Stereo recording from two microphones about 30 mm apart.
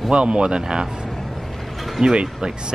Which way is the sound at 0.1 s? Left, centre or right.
Right.